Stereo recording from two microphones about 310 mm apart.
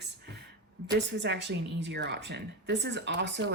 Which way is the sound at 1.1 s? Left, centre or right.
Right.